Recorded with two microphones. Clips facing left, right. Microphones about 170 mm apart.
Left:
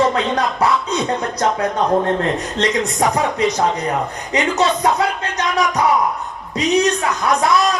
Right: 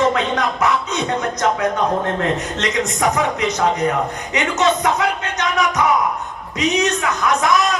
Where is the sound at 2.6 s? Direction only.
35° left (ahead or behind).